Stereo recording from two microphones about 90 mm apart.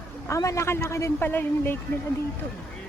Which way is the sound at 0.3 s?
35° left (ahead or behind).